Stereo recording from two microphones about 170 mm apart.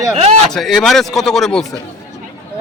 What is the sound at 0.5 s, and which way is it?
A man's voice, centre (ahead or behind).